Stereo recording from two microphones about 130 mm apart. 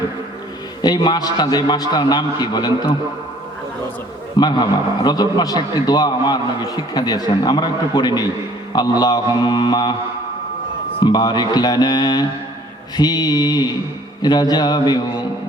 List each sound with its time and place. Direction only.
0.8 s a man's voice: 35° left (ahead or behind)
4.4 s a man's voice: 35° left (ahead or behind)
11.0 s a man's voice: 35° left (ahead or behind)